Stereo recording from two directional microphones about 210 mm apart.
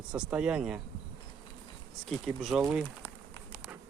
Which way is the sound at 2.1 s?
Centre (ahead or behind).